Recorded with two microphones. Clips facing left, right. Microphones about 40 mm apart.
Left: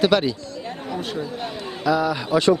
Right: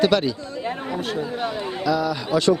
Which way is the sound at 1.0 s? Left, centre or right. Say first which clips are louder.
Right 1 dB; centre.